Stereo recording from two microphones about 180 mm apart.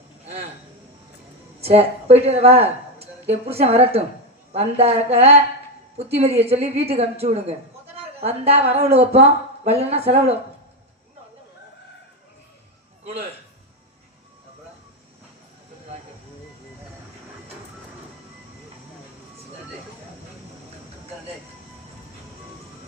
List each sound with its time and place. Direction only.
1.6 s a woman's voice: 35° right (ahead or behind)